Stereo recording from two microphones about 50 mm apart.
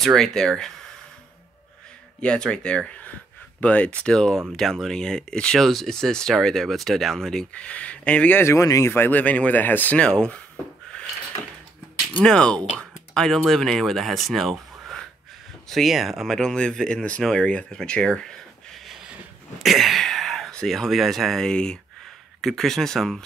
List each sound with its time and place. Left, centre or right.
0.0 s speech: centre
2.2 s speech: centre
4.1 s speech: centre
7.5 s speech: left
8.5 s speech: left
8.9 s speech: left
9.2 s speech: left
9.9 s speech: centre
12.2 s speech: centre
16.3 s speech: centre
19.6 s speech: centre